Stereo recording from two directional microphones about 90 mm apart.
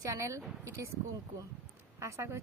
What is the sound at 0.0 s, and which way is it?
Speech, 35° right (ahead or behind).